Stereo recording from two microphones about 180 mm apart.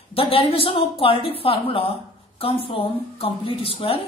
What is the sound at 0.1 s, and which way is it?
A woman's voice, 30° left (ahead or behind).